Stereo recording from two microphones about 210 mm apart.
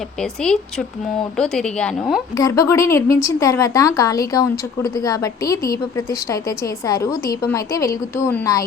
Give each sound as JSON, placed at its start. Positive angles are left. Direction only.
{"t": 0.2, "sound": "a woman's voice", "side_deg": 5}
{"t": 2.3, "sound": "speech", "side_deg": 15}
{"t": 6.8, "sound": "speech", "side_deg": 15}